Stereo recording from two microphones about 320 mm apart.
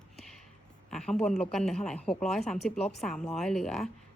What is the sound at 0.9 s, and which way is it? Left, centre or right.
A woman's voice, centre.